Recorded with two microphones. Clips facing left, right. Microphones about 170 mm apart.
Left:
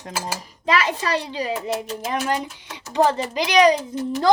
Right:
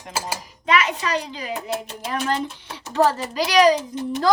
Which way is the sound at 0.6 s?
30° left (ahead or behind).